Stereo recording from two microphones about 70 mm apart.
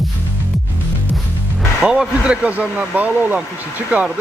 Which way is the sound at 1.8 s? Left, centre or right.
Centre.